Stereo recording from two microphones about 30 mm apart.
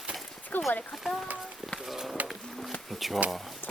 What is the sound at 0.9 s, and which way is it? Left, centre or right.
Speech, centre.